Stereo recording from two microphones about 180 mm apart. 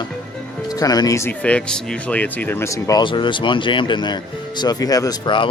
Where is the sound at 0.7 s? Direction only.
20° left (ahead or behind).